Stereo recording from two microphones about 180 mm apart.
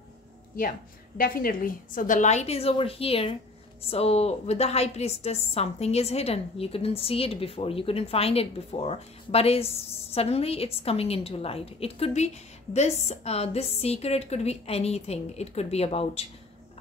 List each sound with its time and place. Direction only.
0.6 s a woman's voice: 50° left (ahead or behind); by 16.3 s 35° left (ahead or behind)